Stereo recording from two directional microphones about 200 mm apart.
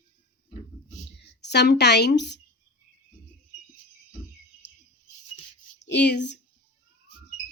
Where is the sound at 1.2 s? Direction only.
55° left (ahead or behind).